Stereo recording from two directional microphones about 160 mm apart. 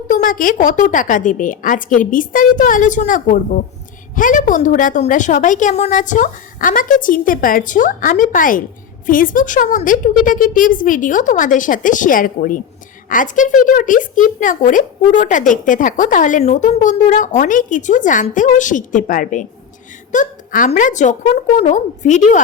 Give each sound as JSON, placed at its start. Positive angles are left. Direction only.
{"t": 0.1, "sound": "a woman's voice", "side_deg": 55}